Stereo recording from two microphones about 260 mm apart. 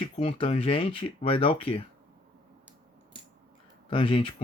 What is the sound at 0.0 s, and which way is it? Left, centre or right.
Speech, left.